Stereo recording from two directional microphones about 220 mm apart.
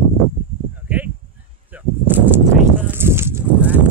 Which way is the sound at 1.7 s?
10° right (ahead or behind).